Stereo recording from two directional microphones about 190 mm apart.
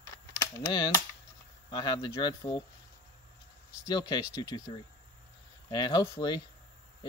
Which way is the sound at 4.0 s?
20° left (ahead or behind).